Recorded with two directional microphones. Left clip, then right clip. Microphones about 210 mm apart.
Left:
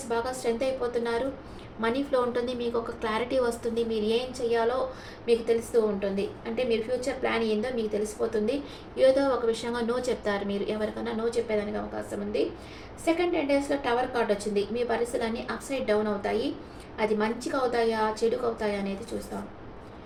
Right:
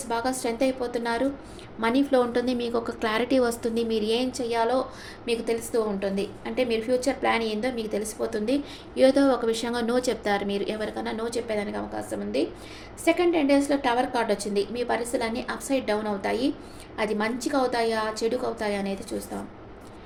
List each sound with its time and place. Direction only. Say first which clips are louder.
0.1 s a woman's voice: right 1 dB; 55° right (ahead or behind)